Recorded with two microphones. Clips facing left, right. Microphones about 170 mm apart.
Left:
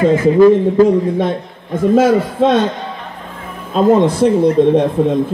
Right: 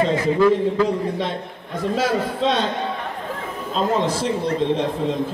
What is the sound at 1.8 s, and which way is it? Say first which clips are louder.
Music: left 10 dB; 50° left (ahead or behind).